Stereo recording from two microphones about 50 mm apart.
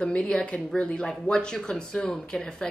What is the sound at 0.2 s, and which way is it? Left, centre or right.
A woman's voice, centre.